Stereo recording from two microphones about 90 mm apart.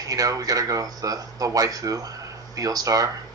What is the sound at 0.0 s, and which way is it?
A man's voice, 40° right (ahead or behind).